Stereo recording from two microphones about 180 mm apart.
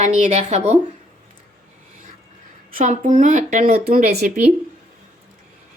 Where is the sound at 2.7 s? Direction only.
45° right (ahead or behind).